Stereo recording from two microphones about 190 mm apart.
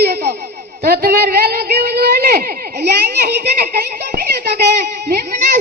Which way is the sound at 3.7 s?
55° right (ahead or behind).